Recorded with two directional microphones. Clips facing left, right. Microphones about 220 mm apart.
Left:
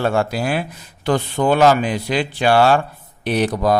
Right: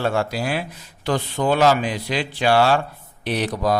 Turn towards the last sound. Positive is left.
turn(degrees=50)  # may be behind; listen again after turning